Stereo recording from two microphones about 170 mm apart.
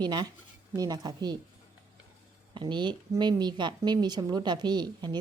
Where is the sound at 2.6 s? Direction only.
25° right (ahead or behind).